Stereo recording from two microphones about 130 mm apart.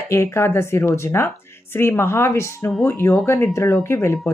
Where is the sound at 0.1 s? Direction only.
20° left (ahead or behind).